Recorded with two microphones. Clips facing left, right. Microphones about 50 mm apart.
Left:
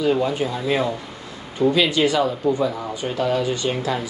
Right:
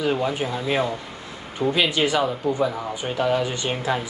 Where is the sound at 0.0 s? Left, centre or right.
Centre.